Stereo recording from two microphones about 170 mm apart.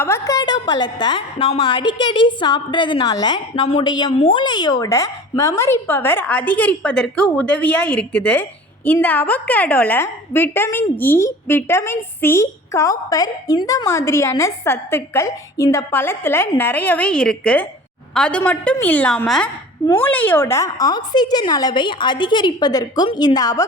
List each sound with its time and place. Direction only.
0.0 s a woman's voice: 20° left (ahead or behind)